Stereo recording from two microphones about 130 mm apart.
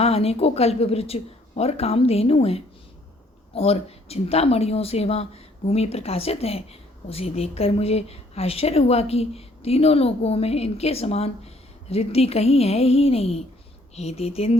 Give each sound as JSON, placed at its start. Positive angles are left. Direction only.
{"t": 0.0, "sound": "a woman's voice", "side_deg": 50}